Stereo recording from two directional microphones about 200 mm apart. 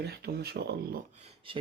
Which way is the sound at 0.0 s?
55° right (ahead or behind).